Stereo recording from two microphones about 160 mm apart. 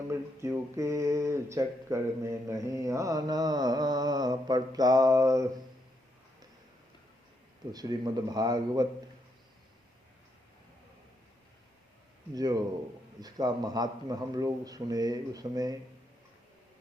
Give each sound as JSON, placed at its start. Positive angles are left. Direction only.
{"t": 0.1, "sound": "speech", "side_deg": -20}
{"t": 7.7, "sound": "speech", "side_deg": -25}
{"t": 12.3, "sound": "speech", "side_deg": -25}